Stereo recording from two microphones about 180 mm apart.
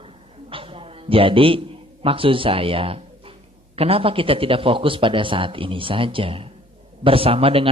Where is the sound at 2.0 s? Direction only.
30° right (ahead or behind).